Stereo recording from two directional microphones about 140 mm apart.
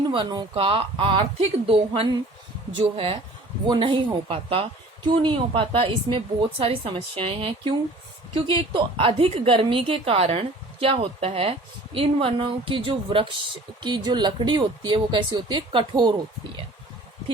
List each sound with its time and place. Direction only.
0.1 s a woman's voice: 35° right (ahead or behind)